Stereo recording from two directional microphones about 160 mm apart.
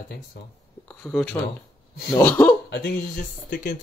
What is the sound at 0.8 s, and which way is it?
Speech, 5° left (ahead or behind).